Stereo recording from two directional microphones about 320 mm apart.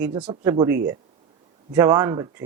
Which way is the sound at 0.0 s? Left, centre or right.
Centre.